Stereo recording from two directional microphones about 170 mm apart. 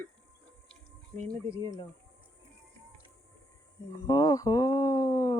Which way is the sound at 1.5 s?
25° left (ahead or behind).